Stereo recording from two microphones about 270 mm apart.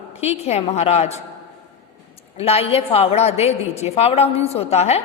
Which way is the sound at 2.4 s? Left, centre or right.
Left.